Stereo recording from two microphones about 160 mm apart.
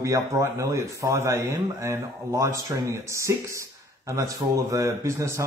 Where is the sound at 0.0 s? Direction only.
20° right (ahead or behind).